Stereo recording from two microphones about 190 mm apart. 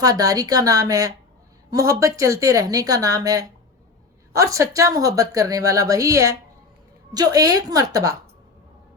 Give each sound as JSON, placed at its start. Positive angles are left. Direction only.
{"t": 0.0, "sound": "a woman's voice", "side_deg": -20}